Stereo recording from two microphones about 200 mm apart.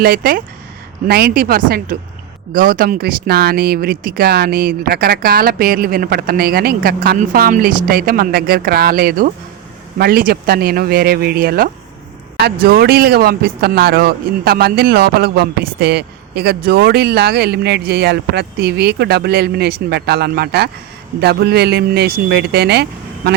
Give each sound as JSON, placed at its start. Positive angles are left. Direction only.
{"t": 0.0, "sound": "a man's voice", "side_deg": -45}